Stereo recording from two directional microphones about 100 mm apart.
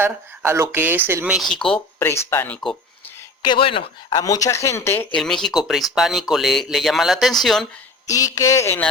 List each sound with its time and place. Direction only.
0.0 s speech: 30° right (ahead or behind)
1.3 s speech: centre (ahead or behind)
2.0 s speech: 25° left (ahead or behind)
3.4 s speech: 55° left (ahead or behind)
4.1 s speech: 35° left (ahead or behind)
5.1 s speech: 5° left (ahead or behind)
8.0 s speech: 35° left (ahead or behind)